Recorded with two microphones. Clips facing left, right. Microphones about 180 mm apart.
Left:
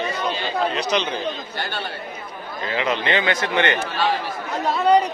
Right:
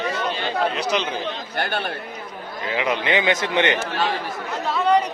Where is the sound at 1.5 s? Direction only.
55° right (ahead or behind).